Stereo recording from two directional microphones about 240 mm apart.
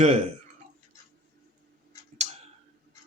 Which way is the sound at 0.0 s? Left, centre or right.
Right.